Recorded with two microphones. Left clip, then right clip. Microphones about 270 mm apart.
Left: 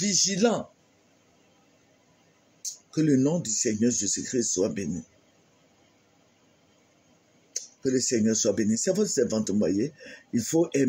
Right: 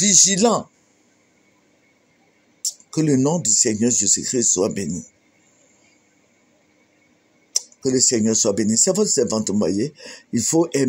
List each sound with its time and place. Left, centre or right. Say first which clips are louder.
0.0 s speech: right 8 dB; right
2.6 s speech: right 5 dB; right
7.5 s speech: right 7 dB; right